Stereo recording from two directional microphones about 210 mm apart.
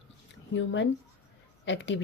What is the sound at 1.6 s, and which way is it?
Speech, 60° left (ahead or behind).